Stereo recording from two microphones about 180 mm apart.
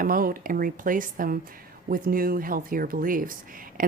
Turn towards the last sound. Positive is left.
turn(degrees=-50)  # may be behind; listen again after turning